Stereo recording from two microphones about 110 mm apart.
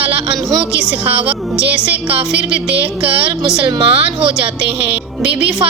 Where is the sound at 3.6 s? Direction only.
55° right (ahead or behind).